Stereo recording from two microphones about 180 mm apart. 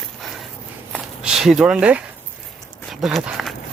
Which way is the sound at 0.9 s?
5° right (ahead or behind).